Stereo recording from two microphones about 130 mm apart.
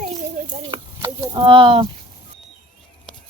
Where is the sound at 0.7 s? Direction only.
30° right (ahead or behind).